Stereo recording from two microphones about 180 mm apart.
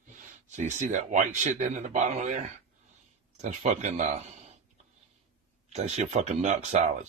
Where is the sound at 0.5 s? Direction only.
40° right (ahead or behind).